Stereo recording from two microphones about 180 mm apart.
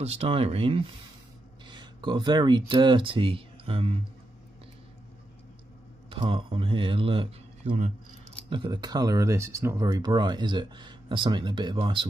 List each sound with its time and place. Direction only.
0.0 s speech: 35° right (ahead or behind)
6.0 s speech: 25° right (ahead or behind)
8.5 s speech: 25° right (ahead or behind)